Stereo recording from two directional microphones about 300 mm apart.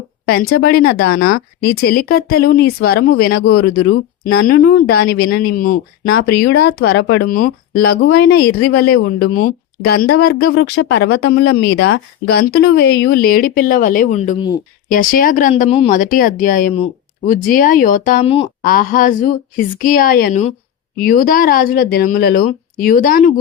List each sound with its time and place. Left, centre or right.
0.3 s speech: left